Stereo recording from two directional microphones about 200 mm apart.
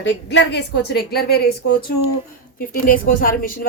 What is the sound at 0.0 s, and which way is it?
A woman's voice, 65° left (ahead or behind).